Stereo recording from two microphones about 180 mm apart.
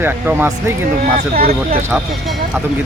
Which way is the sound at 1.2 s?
55° right (ahead or behind).